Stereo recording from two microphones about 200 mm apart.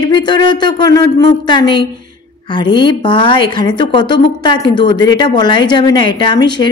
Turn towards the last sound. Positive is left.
turn(degrees=20)  # may be behind; listen again after turning